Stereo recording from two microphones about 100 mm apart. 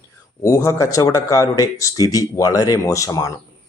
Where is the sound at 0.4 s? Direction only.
30° left (ahead or behind).